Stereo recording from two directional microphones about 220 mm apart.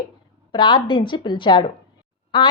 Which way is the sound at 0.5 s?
20° left (ahead or behind).